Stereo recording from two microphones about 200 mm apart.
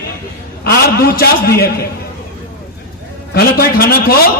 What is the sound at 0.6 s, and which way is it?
A man's voice, 50° left (ahead or behind).